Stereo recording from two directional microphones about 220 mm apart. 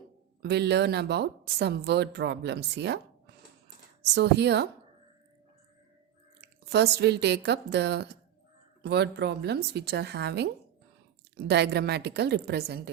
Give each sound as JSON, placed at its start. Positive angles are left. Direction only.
{"t": 0.4, "sound": "a woman's voice", "side_deg": -50}
{"t": 4.0, "sound": "a woman's voice", "side_deg": -50}
{"t": 6.7, "sound": "a woman's voice", "side_deg": -50}